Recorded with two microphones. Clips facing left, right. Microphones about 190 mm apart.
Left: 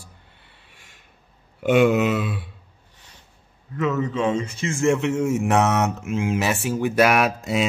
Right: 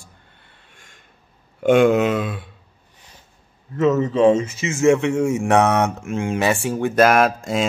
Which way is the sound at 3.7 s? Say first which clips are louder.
Right 6 dB; 20° right (ahead or behind).